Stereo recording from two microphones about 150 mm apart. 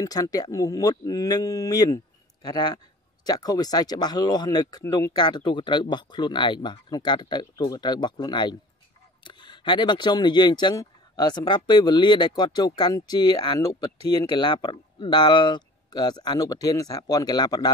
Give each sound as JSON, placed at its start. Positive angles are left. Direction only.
{"t": 0.0, "sound": "speech", "side_deg": 25}